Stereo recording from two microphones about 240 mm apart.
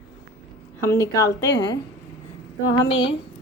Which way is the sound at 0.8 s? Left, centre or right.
Centre.